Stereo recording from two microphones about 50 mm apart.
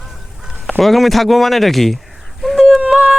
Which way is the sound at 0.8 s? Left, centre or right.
Centre.